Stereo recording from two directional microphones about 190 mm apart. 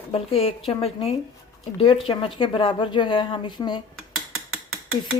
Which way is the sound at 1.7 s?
30° left (ahead or behind).